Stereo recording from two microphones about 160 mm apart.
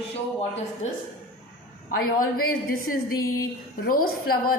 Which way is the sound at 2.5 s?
65° left (ahead or behind).